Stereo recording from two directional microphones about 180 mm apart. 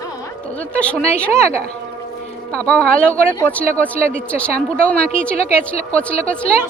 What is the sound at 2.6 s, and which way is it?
Speech, 5° left (ahead or behind).